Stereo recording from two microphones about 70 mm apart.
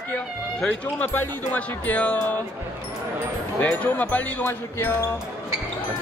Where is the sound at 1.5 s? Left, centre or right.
Left.